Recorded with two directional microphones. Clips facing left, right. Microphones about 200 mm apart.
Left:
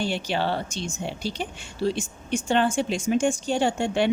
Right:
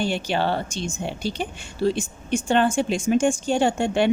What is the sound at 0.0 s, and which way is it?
Speech, 50° right (ahead or behind).